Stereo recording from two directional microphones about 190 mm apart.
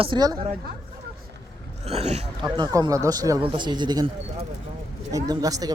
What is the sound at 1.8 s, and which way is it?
Speech, 35° right (ahead or behind).